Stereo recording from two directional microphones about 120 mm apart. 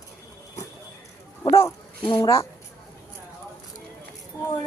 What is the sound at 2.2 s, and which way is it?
Speech, 25° left (ahead or behind).